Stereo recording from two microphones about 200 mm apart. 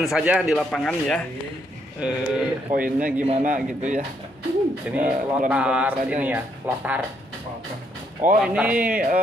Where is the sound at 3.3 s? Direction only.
35° right (ahead or behind).